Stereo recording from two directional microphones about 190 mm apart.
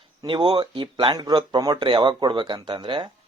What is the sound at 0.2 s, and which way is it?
Speech, 25° right (ahead or behind).